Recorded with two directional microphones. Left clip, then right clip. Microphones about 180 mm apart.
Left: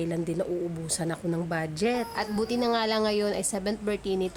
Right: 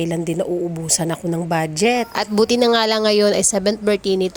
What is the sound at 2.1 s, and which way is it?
A woman's voice, 45° right (ahead or behind).